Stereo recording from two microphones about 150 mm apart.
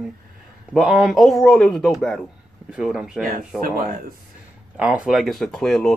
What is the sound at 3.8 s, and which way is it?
Speech, 70° right (ahead or behind).